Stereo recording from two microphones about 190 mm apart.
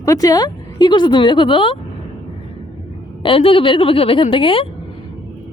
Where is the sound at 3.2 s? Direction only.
30° left (ahead or behind).